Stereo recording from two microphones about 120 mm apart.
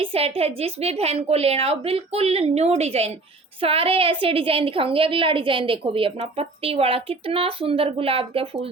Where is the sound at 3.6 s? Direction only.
50° right (ahead or behind).